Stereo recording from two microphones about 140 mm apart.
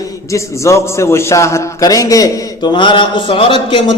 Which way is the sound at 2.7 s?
35° left (ahead or behind).